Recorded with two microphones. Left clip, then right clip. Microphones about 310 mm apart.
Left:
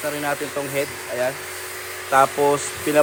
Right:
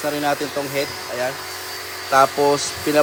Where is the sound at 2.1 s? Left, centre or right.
Centre.